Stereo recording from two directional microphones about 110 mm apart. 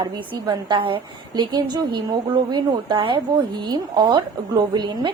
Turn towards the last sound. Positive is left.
turn(degrees=-40)  # may be behind; listen again after turning